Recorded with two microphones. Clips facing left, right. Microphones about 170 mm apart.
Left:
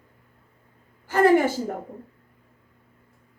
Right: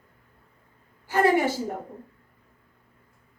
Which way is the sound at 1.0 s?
50° left (ahead or behind).